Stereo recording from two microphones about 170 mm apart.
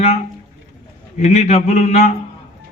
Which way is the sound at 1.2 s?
40° left (ahead or behind).